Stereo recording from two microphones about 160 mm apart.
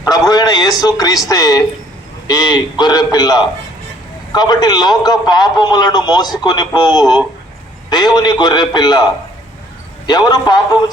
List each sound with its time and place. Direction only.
0.0 s radio: 25° left (ahead or behind)
1.3 s a man's voice: 25° left (ahead or behind)
10.1 s a man's voice: 25° left (ahead or behind)